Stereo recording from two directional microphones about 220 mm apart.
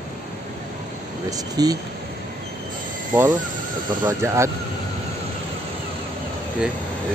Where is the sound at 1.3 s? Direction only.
15° right (ahead or behind).